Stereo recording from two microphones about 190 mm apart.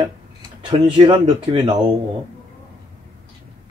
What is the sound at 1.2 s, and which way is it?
Speech, 25° right (ahead or behind).